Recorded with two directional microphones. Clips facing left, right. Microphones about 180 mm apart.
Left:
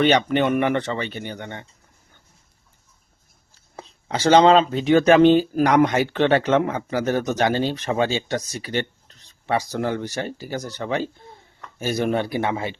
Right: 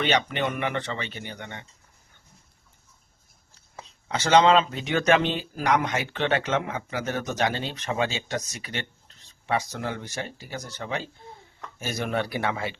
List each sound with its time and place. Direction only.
0.0 s speech: 35° left (ahead or behind)
0.3 s speech: 50° left (ahead or behind)
3.8 s speech: 30° left (ahead or behind)